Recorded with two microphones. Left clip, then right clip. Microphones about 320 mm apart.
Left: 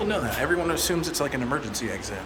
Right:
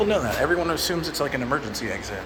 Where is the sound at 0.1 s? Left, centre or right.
Centre.